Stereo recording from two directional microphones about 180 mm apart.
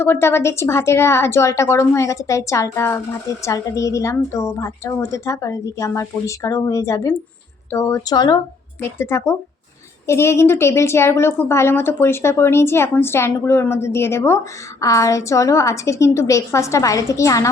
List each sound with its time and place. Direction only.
0.0 s a woman's voice: 15° left (ahead or behind)